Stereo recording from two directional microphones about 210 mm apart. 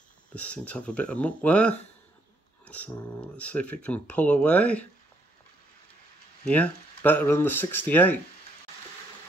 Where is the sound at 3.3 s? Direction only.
5° left (ahead or behind).